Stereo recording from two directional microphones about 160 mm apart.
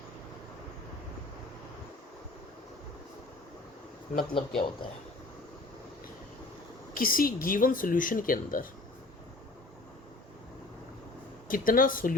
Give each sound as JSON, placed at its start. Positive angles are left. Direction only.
{"t": 4.4, "sound": "speech", "side_deg": 30}
{"t": 6.9, "sound": "speech", "side_deg": 65}
{"t": 11.4, "sound": "speech", "side_deg": 60}